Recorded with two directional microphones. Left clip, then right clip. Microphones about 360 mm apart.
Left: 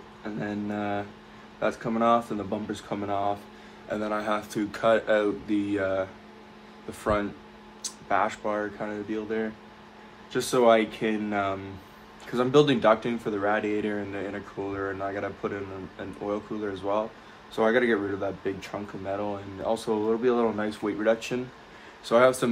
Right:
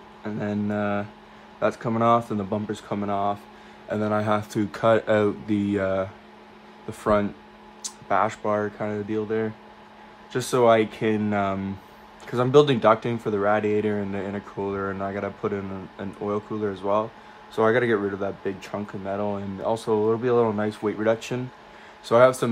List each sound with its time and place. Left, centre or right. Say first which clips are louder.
0.2 s speech: right 4 dB; right